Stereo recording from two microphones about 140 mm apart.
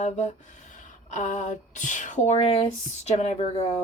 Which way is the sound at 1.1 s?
60° left (ahead or behind).